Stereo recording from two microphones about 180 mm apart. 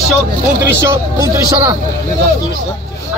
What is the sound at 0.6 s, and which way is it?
Speech, 15° right (ahead or behind).